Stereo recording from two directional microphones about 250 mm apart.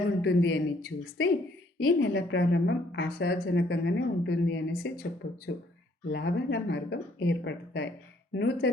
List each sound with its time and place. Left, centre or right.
0.2 s a woman's voice: left